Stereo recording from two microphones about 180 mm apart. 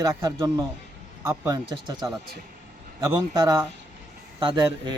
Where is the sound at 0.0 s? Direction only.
20° right (ahead or behind).